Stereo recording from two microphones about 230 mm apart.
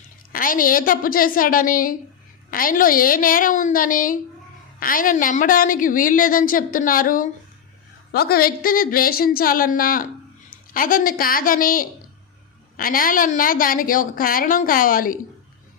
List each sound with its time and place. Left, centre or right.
0.3 s a woman's voice: left